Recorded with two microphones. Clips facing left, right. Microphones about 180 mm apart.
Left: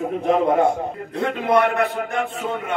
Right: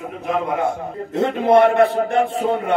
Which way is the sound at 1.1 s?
25° right (ahead or behind).